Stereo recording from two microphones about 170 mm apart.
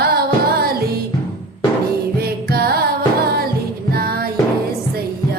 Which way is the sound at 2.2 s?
65° right (ahead or behind).